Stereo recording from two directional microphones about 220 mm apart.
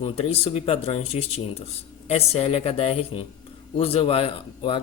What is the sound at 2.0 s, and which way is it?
A man's voice, 30° left (ahead or behind).